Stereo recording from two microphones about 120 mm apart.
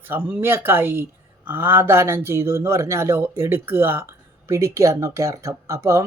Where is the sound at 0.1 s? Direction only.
15° right (ahead or behind).